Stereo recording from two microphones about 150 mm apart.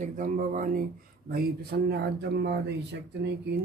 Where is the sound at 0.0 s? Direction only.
65° right (ahead or behind).